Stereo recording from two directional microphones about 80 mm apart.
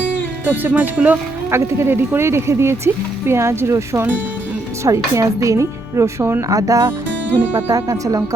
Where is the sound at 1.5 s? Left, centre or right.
Right.